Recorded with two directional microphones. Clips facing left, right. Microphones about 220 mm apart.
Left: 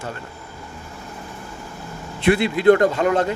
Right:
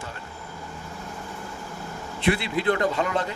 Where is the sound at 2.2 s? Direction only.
45° left (ahead or behind).